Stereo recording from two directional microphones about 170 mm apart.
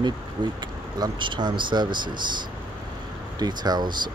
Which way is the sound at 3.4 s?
25° right (ahead or behind).